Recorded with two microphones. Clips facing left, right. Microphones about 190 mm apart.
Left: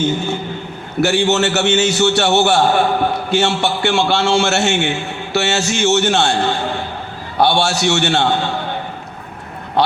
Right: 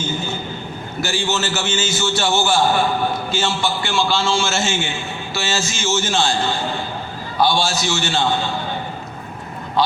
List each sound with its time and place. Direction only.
1.0 s a man's voice: 65° left (ahead or behind)
9.8 s speech: 65° left (ahead or behind)